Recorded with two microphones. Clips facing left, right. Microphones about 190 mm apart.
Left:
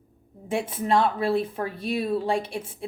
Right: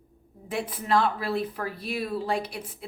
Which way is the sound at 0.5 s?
30° left (ahead or behind).